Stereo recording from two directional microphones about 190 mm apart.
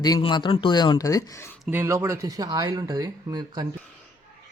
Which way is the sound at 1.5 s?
5° right (ahead or behind).